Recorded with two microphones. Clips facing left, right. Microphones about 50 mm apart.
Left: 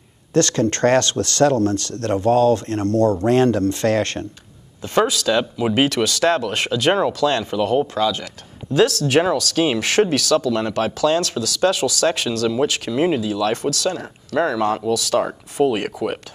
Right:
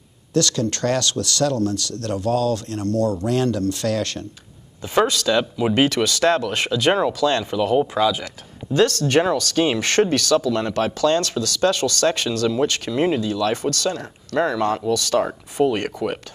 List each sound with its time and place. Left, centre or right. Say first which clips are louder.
0.3 s speech: left 3 dB; left
4.8 s speech: left 1 dB; centre
7.8 s speech: right 1 dB; centre
8.7 s speech: left 1 dB; centre